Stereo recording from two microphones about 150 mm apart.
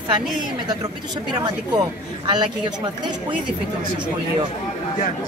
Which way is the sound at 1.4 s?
30° right (ahead or behind).